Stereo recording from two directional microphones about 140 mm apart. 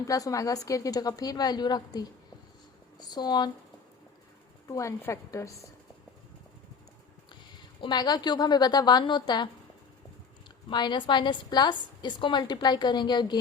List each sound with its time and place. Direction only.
0.1 s a woman's voice: 25° left (ahead or behind)
4.7 s a woman's voice: 20° left (ahead or behind)
7.8 s a woman's voice: 30° left (ahead or behind)
10.7 s a woman's voice: 35° left (ahead or behind)